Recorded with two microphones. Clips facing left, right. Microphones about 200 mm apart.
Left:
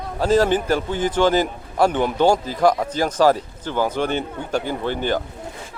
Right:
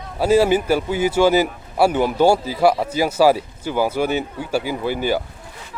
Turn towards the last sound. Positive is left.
turn(degrees=-10)  # may be behind; listen again after turning